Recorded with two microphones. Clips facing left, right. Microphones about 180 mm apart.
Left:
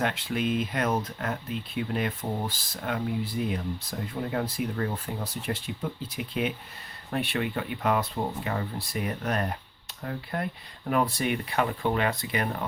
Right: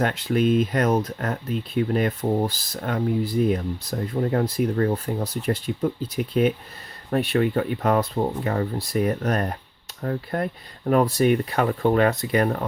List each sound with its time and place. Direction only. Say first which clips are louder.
0.0 s speech: right 7 dB; 40° right (ahead or behind)